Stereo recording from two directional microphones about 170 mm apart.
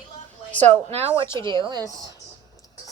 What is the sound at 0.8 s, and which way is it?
Speech, 35° right (ahead or behind).